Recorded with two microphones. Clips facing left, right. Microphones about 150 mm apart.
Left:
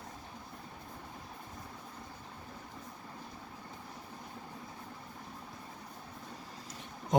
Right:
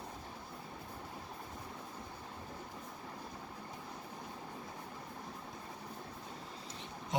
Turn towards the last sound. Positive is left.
turn(degrees=45)  # may be behind; listen again after turning